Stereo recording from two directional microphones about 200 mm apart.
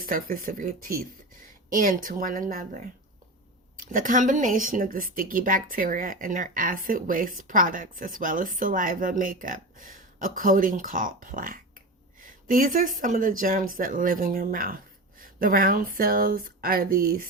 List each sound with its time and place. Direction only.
0.0 s speech: 45° right (ahead or behind)
3.9 s speech: 40° right (ahead or behind)